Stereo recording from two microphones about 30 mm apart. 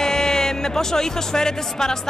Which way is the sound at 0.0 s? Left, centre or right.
Centre.